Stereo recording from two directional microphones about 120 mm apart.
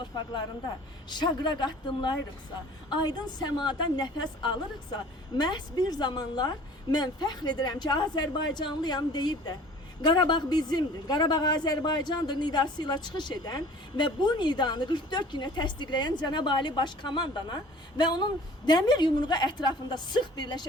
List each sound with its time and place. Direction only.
0.0 s a woman's voice: 40° left (ahead or behind)